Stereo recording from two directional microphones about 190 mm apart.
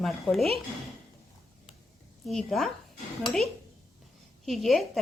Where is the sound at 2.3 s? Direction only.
Centre (ahead or behind).